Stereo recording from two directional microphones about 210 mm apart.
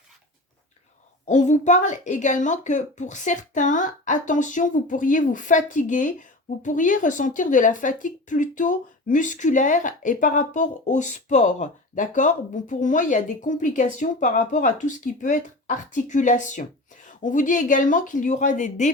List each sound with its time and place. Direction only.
1.3 s speech: 35° left (ahead or behind)